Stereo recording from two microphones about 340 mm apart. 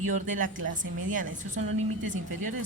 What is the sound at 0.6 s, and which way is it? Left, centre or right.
Speech, right.